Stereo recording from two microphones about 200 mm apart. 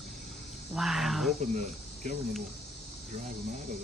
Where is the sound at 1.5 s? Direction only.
40° right (ahead or behind).